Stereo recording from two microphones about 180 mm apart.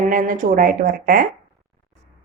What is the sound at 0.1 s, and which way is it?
A woman's voice, 45° right (ahead or behind).